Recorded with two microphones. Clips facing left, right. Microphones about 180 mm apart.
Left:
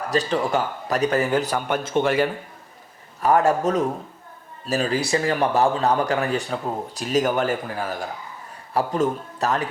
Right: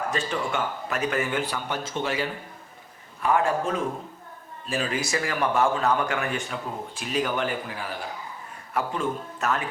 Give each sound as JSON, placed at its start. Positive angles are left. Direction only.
{"t": 0.1, "sound": "speech", "side_deg": 35}
{"t": 3.2, "sound": "speech", "side_deg": 40}